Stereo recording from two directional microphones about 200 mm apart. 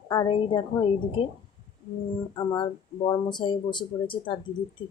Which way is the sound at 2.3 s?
20° left (ahead or behind).